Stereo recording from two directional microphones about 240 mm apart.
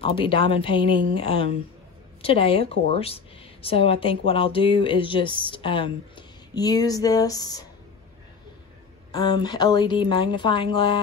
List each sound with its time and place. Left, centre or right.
0.0 s speech: left
9.1 s speech: centre